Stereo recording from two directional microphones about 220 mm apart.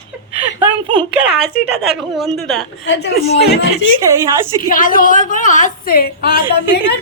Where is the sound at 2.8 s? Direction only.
50° left (ahead or behind).